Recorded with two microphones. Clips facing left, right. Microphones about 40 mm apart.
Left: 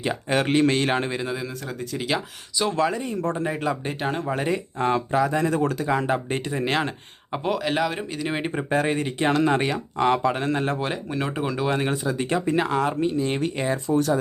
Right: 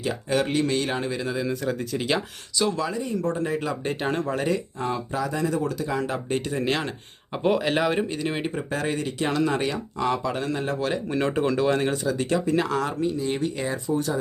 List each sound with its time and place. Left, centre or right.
0.0 s speech: left
0.4 s speech: left
1.2 s speech: centre
1.5 s speech: centre
2.6 s speech: left; by 3.8 s centre
3.8 s speech: centre
4.3 s speech: centre
4.5 s speech: left
6.5 s speech: centre
7.4 s speech: centre
8.4 s speech: left
10.8 s speech: left
11.3 s speech: centre; by 13.9 s left